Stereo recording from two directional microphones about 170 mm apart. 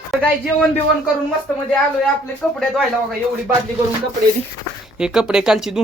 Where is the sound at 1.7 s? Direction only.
5° left (ahead or behind).